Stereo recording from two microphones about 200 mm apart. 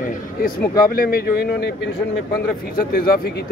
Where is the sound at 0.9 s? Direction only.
50° left (ahead or behind).